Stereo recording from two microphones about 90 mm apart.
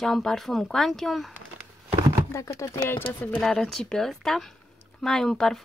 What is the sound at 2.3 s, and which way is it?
Speech, 35° left (ahead or behind).